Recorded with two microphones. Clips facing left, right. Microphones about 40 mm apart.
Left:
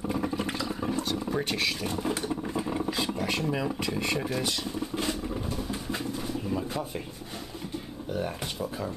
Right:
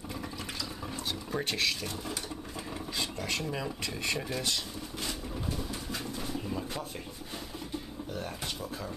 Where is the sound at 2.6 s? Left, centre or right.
Centre.